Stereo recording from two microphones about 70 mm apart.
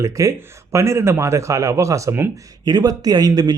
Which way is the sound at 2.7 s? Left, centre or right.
Right.